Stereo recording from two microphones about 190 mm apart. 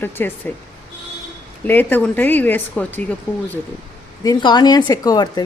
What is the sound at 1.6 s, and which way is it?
Speech, 10° left (ahead or behind).